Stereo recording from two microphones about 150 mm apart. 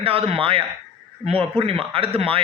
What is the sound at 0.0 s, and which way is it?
A man's voice, 40° right (ahead or behind).